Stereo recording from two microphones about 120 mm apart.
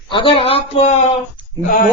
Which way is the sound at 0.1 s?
45° left (ahead or behind).